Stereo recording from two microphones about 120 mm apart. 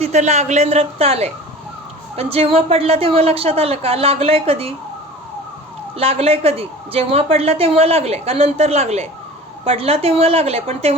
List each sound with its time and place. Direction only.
0.0 s a woman's voice: 75° right (ahead or behind); by 4.7 s 55° right (ahead or behind)
6.0 s a woman's voice: 55° right (ahead or behind)